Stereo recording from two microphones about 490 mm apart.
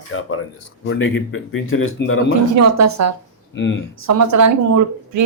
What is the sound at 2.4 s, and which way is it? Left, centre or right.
Speech, right.